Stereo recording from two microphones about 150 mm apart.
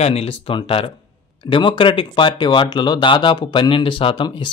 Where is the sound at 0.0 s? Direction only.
40° left (ahead or behind).